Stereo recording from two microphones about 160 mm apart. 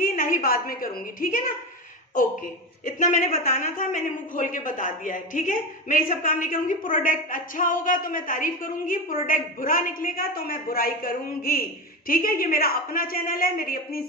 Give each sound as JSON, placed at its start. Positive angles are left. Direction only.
{"t": 0.0, "sound": "a woman's voice", "side_deg": 60}